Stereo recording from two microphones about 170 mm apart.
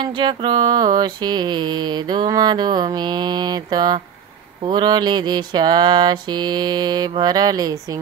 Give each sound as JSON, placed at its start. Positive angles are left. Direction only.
{"t": 0.0, "sound": "mantra", "side_deg": -25}